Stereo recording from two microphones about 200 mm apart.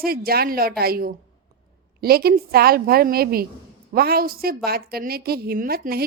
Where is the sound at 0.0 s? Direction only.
50° right (ahead or behind).